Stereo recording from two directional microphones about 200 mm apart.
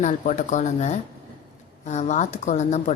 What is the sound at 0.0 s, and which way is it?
A woman's voice, 40° left (ahead or behind).